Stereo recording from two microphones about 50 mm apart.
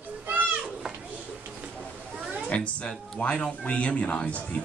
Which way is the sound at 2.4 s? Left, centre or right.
Left.